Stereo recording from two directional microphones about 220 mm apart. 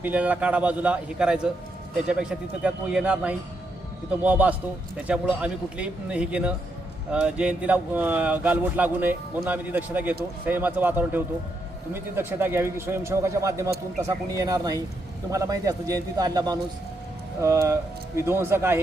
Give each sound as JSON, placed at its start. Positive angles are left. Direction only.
{"t": 0.0, "sound": "speech", "side_deg": -5}
{"t": 2.6, "sound": "speech", "side_deg": -5}